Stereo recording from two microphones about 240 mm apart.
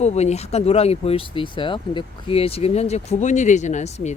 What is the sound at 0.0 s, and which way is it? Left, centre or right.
Speech, left.